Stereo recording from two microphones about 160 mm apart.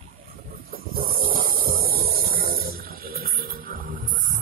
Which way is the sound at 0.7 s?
65° right (ahead or behind).